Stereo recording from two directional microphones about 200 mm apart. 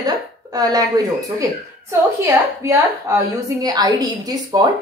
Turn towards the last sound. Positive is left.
turn(degrees=-20)  # may be behind; listen again after turning